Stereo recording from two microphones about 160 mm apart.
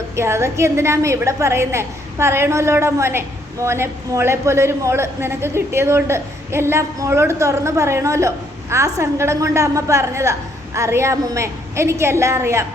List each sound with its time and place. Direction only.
0.2 s a woman's voice: 15° right (ahead or behind)